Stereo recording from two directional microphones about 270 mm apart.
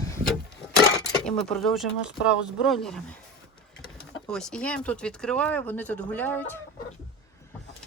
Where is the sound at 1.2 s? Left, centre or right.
Centre.